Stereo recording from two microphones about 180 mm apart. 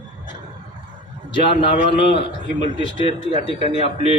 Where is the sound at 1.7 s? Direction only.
30° left (ahead or behind).